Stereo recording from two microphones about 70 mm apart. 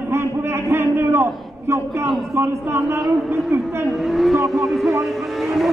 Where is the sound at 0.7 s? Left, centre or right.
Right.